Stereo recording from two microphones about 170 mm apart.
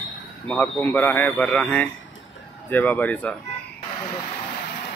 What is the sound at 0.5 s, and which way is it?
Speech, 10° left (ahead or behind).